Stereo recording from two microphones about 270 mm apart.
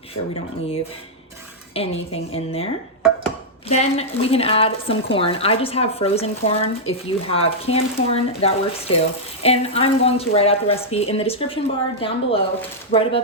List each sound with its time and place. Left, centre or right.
1.7 s speech: left
3.7 s speech: left